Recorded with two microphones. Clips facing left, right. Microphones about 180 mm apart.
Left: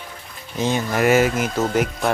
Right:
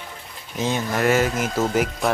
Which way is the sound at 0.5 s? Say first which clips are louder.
Left 2 dB; centre (ahead or behind).